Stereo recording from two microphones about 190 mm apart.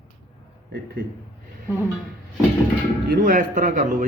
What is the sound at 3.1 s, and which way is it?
Speech, 45° right (ahead or behind).